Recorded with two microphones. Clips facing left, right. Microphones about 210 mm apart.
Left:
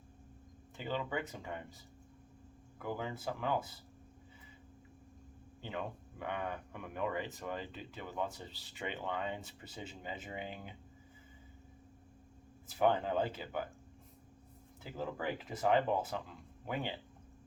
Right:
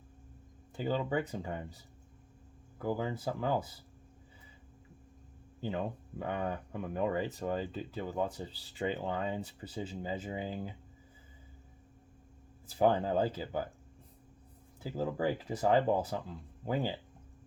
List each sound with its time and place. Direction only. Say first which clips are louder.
0.8 s speech: right 6 dB; 35° right (ahead or behind)
2.7 s speech: right 6 dB; 35° right (ahead or behind)
5.5 s speech: right 6 dB; 35° right (ahead or behind)
12.8 s speech: right 3 dB; 35° right (ahead or behind)
14.8 s speech: right 6 dB; 35° right (ahead or behind)